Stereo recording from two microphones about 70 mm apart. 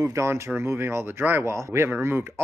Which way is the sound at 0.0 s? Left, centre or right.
Right.